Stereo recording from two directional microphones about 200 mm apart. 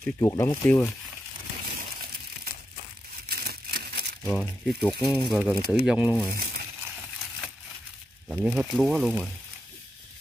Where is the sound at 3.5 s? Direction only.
50° right (ahead or behind).